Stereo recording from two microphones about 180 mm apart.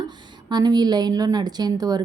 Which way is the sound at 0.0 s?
25° right (ahead or behind).